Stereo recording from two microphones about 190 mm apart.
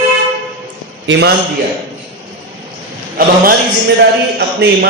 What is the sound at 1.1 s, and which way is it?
Speech, 65° right (ahead or behind).